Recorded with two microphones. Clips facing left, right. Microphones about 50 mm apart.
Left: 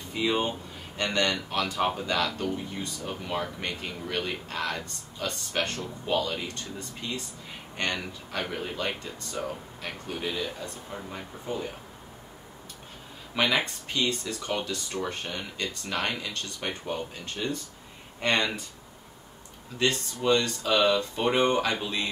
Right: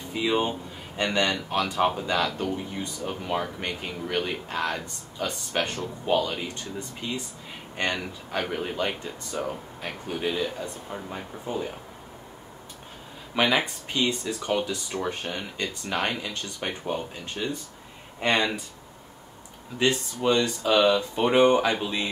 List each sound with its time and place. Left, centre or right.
0.1 s speech: centre
8.3 s a man's voice: centre
13.3 s speech: centre
13.9 s speech: right
19.8 s speech: centre